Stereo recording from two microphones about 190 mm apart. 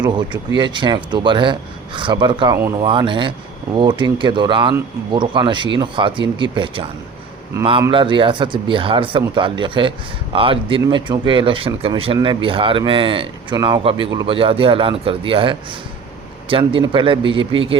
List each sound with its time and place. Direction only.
0.0 s speech: 25° right (ahead or behind)